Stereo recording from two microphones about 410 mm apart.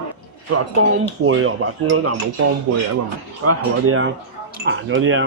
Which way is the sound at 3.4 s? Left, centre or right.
Right.